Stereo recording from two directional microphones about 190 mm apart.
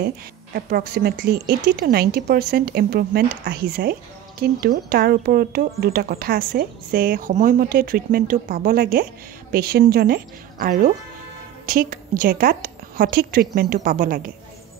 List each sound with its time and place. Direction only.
0.6 s speech: 50° right (ahead or behind)